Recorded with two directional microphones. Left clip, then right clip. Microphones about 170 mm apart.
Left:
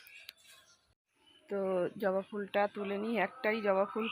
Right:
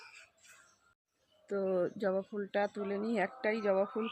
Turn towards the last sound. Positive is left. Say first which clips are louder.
# left 1 dB
turn(degrees=-15)  # may be behind; listen again after turning